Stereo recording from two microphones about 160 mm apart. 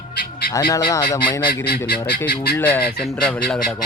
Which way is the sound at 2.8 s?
75° left (ahead or behind).